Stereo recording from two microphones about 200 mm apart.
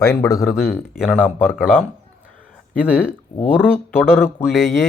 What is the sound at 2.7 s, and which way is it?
Speech, 5° right (ahead or behind).